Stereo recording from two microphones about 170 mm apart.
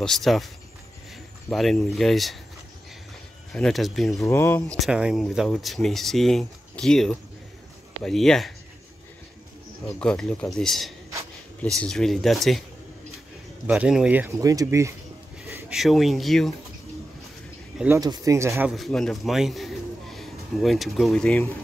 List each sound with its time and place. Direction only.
0.0 s speech: centre (ahead or behind)
1.5 s speech: centre (ahead or behind)
3.5 s speech: centre (ahead or behind)
4.2 s speech: 15° left (ahead or behind)
4.7 s speech: 5° right (ahead or behind)
9.9 s speech: 5° left (ahead or behind)
13.7 s speech: 5° right (ahead or behind)
15.4 s speech: centre (ahead or behind)
17.7 s speech: 10° right (ahead or behind)
18.8 s a man's voice: 5° left (ahead or behind)